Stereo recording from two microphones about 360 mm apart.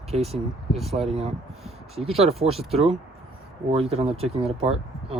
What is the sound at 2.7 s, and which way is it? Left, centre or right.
Speech, centre.